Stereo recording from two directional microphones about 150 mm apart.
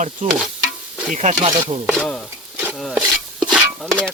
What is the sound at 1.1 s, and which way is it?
Speech, 50° right (ahead or behind).